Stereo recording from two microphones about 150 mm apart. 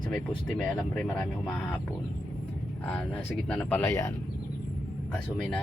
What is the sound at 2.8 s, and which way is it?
Speech, 10° left (ahead or behind).